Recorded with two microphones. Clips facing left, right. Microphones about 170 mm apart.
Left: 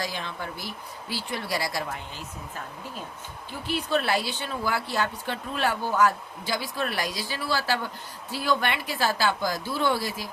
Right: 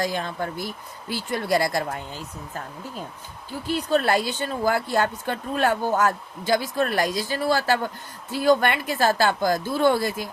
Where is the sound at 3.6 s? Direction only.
40° right (ahead or behind).